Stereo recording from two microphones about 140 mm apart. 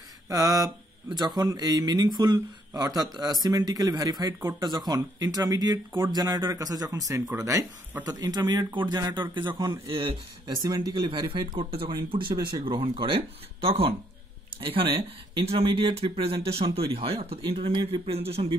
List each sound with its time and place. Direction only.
0.3 s speech: 25° right (ahead or behind); by 18.6 s 45° right (ahead or behind)